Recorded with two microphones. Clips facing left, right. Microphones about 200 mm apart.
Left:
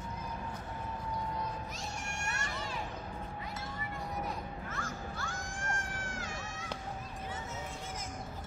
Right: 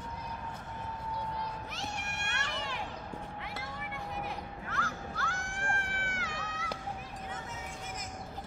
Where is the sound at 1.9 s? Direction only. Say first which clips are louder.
Even; 65° right (ahead or behind).